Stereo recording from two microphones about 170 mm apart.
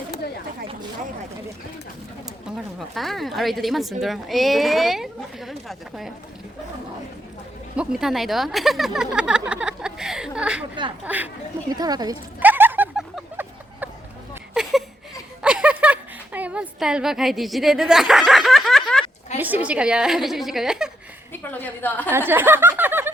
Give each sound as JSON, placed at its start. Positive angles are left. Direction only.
{"t": 2.7, "sound": "speech", "side_deg": 0}
{"t": 7.8, "sound": "speech", "side_deg": 0}
{"t": 11.7, "sound": "speech", "side_deg": -25}
{"t": 12.4, "sound": "a sound", "side_deg": -10}
{"t": 19.4, "sound": "speech", "side_deg": -10}
{"t": 21.4, "sound": "a woman's voice", "side_deg": 10}
{"t": 22.3, "sound": "a sound", "side_deg": -10}